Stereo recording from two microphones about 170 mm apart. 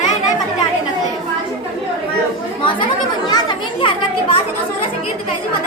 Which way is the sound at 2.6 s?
30° left (ahead or behind).